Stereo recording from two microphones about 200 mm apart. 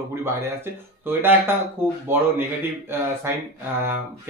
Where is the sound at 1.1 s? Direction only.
10° right (ahead or behind).